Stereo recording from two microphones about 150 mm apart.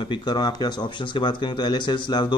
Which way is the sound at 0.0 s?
30° left (ahead or behind).